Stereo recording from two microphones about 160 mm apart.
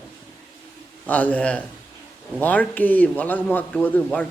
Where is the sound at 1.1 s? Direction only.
10° left (ahead or behind).